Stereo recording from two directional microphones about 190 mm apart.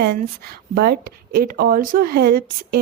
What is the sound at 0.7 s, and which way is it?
A woman's voice, 50° right (ahead or behind).